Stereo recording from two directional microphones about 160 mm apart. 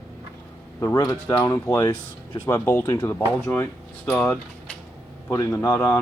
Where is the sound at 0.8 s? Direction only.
20° left (ahead or behind); by 4.4 s 5° left (ahead or behind).